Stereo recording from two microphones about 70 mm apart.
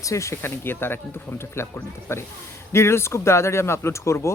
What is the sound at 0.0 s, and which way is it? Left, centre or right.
Speech, left.